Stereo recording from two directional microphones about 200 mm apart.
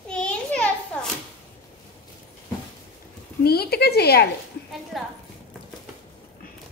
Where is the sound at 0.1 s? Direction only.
5° left (ahead or behind).